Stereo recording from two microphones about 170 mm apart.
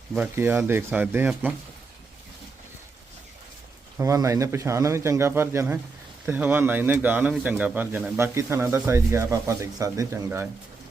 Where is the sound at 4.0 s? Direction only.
20° right (ahead or behind).